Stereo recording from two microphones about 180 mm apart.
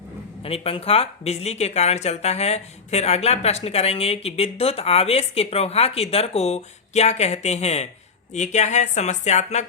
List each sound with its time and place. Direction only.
0.4 s speech: 35° left (ahead or behind)